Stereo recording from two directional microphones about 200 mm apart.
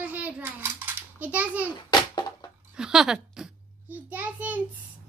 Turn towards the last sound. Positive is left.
turn(degrees=-10)  # may be behind; listen again after turning